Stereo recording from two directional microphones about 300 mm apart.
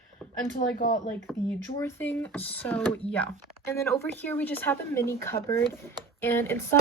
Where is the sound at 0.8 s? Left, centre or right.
Left.